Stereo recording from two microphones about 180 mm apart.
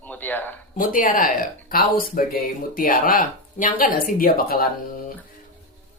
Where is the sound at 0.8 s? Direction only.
50° left (ahead or behind).